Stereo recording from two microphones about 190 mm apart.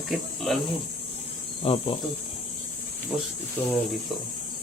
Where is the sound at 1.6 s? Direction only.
30° left (ahead or behind).